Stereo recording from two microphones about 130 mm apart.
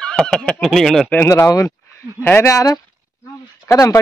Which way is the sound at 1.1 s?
20° left (ahead or behind).